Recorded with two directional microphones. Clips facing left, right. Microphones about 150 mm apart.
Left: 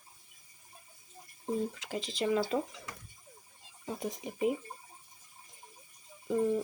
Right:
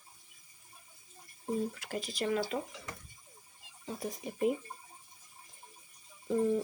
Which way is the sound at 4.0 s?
20° left (ahead or behind).